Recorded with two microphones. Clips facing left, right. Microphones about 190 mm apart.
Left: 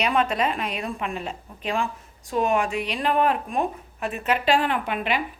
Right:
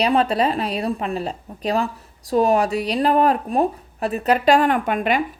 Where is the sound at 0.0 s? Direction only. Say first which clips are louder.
Right 5 dB; 35° right (ahead or behind).